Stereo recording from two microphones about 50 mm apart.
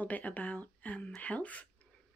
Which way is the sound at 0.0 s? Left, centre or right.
Left.